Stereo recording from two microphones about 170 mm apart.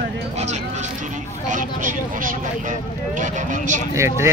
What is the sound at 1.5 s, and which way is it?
Vehicle, 50° right (ahead or behind).